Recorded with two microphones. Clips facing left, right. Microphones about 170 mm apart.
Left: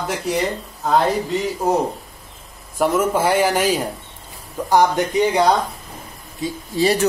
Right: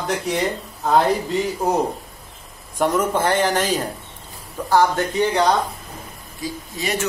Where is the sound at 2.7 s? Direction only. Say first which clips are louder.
Left 2 dB; 5° left (ahead or behind).